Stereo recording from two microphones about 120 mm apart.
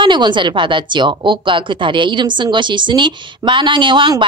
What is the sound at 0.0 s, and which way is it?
A woman's voice, 40° right (ahead or behind).